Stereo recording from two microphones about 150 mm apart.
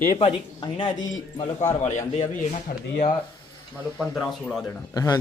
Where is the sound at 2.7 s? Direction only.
80° left.